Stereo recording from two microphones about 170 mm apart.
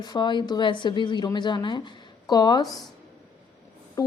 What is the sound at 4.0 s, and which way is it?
Speech, 20° left (ahead or behind).